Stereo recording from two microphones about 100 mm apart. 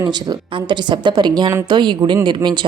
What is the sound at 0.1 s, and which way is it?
A woman's voice, 45° right (ahead or behind).